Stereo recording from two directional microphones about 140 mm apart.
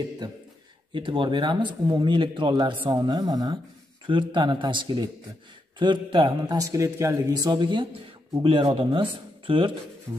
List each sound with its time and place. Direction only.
0.9 s a man's voice: 35° right (ahead or behind)
10.1 s rub: 25° right (ahead or behind)